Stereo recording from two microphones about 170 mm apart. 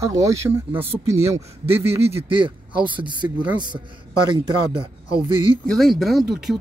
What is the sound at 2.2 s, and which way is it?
Speech, 30° right (ahead or behind).